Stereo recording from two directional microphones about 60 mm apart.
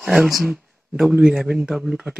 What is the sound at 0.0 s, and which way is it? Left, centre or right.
Speech, centre.